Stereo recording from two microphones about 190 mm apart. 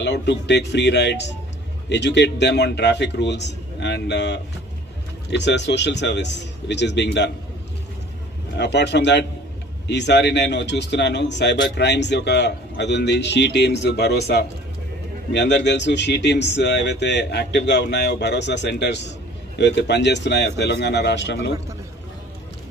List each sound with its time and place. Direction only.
0.0 s speech: 65° left (ahead or behind)
8.5 s speech: 65° left (ahead or behind)